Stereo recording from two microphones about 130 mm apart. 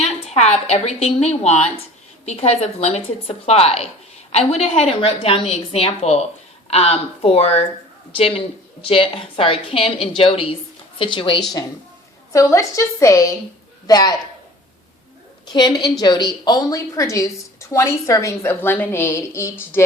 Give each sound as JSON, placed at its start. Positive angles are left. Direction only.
{"t": 0.0, "sound": "a woman's voice", "side_deg": 60}
{"t": 12.3, "sound": "a woman's voice", "side_deg": 25}
{"t": 15.8, "sound": "a woman's voice", "side_deg": 35}